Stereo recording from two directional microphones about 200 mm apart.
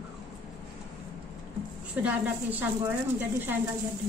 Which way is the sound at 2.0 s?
10° right (ahead or behind).